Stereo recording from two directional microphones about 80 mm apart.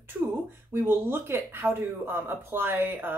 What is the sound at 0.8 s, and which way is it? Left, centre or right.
Speech, right.